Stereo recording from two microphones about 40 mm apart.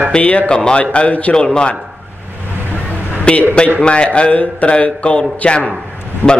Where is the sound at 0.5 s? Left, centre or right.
Left.